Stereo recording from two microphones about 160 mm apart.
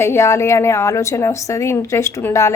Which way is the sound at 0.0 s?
15° left (ahead or behind).